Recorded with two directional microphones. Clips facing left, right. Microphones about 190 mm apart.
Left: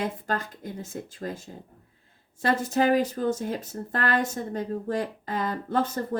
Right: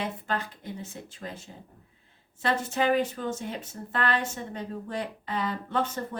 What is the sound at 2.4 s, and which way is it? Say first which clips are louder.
Speech: left 3 dB; 40° left (ahead or behind).